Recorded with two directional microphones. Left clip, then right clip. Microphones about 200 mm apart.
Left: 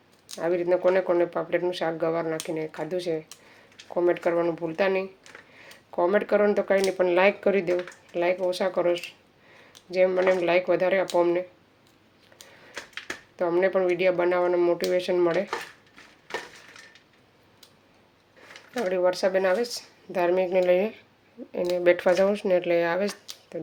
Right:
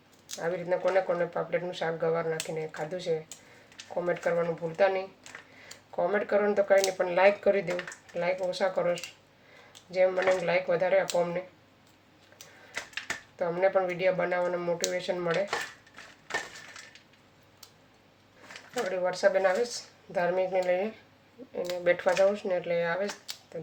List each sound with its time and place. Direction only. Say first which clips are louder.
0.3 s speech: left 6 dB; 50° left (ahead or behind)
6.1 s speech: left 5 dB; 50° left (ahead or behind)
13.4 s speech: left 3 dB; 50° left (ahead or behind)
18.7 s speech: left 6 dB; 50° left (ahead or behind)